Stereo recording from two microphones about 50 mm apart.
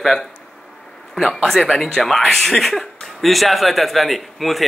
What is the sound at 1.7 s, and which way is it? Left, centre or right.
Speech, centre.